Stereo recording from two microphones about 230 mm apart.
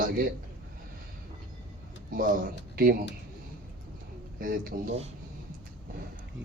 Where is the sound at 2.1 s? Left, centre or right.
Right.